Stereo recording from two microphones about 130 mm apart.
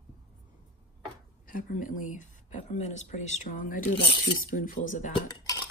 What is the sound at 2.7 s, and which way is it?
A woman's voice, 65° left (ahead or behind).